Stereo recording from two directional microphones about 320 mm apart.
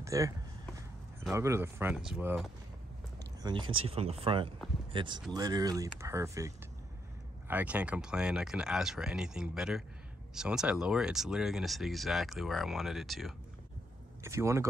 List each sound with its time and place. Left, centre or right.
0.0 s speech: centre
3.4 s speech: centre